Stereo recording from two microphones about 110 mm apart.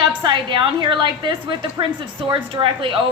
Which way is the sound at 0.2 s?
45° right (ahead or behind).